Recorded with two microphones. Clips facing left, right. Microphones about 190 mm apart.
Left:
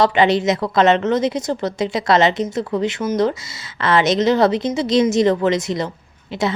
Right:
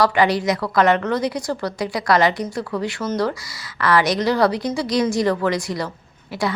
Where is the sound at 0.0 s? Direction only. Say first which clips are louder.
Left 2 dB; 25° left (ahead or behind).